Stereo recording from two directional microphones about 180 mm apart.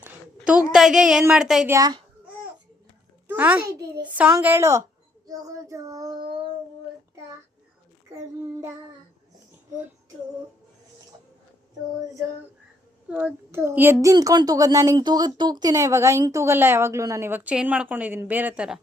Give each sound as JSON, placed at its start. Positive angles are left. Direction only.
{"t": 0.3, "sound": "a sound", "side_deg": -5}
{"t": 0.7, "sound": "speech", "side_deg": -5}
{"t": 1.7, "sound": "child singing", "side_deg": -20}
{"t": 3.2, "sound": "speech", "side_deg": -10}
{"t": 5.2, "sound": "child singing", "side_deg": -20}
{"t": 13.1, "sound": "speech", "side_deg": -5}